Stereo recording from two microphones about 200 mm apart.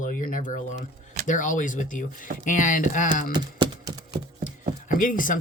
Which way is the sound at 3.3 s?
20° right (ahead or behind).